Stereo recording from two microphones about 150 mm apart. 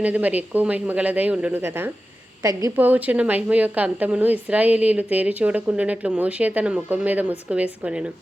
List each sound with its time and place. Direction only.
0.0 s a woman's voice: 10° right (ahead or behind)
2.7 s speech: 10° right (ahead or behind)